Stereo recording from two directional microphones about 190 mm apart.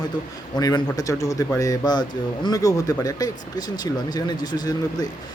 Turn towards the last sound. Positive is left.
turn(degrees=20)  # may be behind; listen again after turning